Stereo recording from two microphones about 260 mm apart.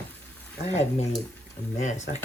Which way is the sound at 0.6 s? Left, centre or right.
Left.